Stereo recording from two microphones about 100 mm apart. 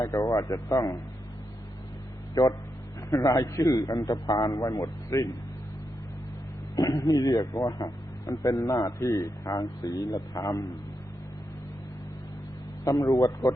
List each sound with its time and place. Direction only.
0.0 s a man's voice: 35° left (ahead or behind)
3.2 s a man's voice: 35° left (ahead or behind)
6.7 s a man's voice: 35° left (ahead or behind)
12.8 s a man's voice: 35° left (ahead or behind)